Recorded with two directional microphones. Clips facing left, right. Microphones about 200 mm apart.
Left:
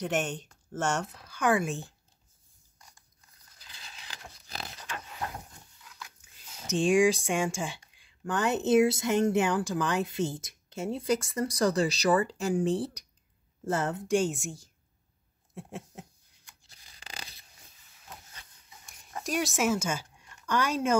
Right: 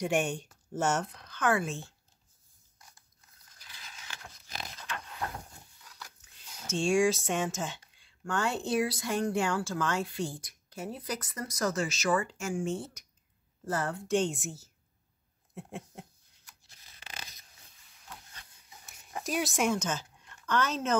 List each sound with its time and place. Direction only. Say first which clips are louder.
0.0 s speech: right 1 dB; 10° right (ahead or behind); by 2.0 s 15° left (ahead or behind)
3.6 s a sound: left 1 dB; 20° left (ahead or behind)
4.1 s dog: left 1 dB; 35° left (ahead or behind)
6.5 s speech: left 3 dB; 15° left (ahead or behind); by 13.0 s 35° left (ahead or behind)
13.7 s speech: left 3 dB; 25° left (ahead or behind)
14.3 s a woman's voice: left 2 dB; 5° right (ahead or behind)
15.5 s a sound: left 1 dB; centre (ahead or behind)
19.2 s speech: left 1 dB; centre (ahead or behind)